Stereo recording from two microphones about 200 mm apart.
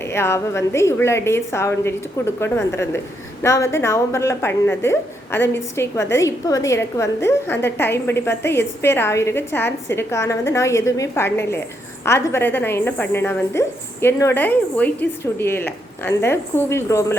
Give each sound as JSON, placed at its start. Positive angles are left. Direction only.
{"t": 0.1, "sound": "a woman's voice", "side_deg": 15}